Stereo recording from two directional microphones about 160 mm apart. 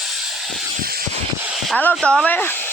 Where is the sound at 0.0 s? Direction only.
Centre (ahead or behind).